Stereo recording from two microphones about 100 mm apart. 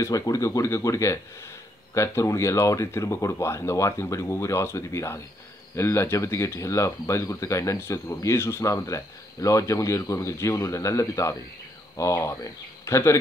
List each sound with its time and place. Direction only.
0.0 s speech: 35° left (ahead or behind)